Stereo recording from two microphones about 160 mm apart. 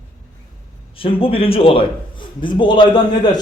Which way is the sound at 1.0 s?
35° left (ahead or behind).